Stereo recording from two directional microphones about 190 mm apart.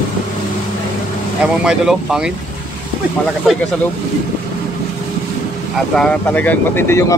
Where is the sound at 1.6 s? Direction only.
5° right (ahead or behind).